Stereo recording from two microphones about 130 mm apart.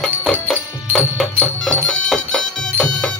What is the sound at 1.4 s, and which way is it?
Music, 10° left (ahead or behind).